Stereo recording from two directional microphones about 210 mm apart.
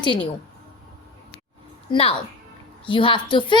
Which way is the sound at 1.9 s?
25° left (ahead or behind).